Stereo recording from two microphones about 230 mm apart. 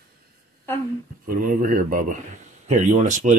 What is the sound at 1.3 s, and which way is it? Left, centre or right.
Speech, right.